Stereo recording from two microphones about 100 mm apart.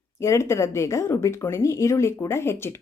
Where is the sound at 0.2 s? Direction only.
25° left (ahead or behind).